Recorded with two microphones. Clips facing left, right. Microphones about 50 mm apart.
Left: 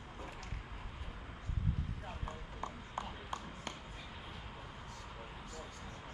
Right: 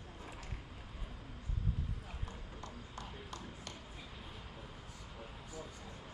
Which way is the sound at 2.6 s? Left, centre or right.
Left.